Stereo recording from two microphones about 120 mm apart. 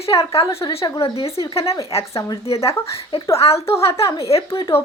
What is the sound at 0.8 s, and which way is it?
Speech, 35° left (ahead or behind).